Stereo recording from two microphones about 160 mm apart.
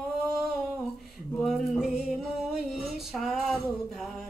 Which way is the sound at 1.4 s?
Centre (ahead or behind).